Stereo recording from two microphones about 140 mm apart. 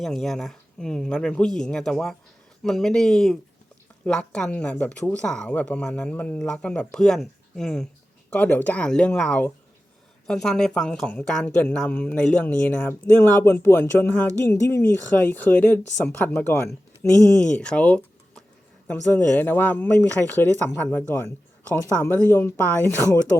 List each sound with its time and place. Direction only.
0.0 s speech: centre (ahead or behind)